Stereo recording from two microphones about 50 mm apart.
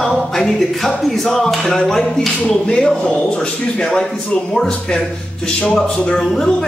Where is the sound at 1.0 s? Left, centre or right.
Centre.